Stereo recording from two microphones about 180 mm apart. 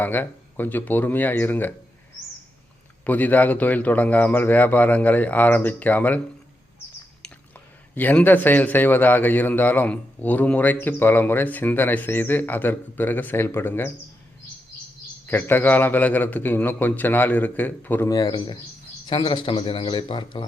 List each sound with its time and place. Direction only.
0.0 s a man's voice: 10° left (ahead or behind)
3.1 s a man's voice: 10° left (ahead or behind)
7.9 s a man's voice: 10° left (ahead or behind)
15.3 s a man's voice: 10° left (ahead or behind)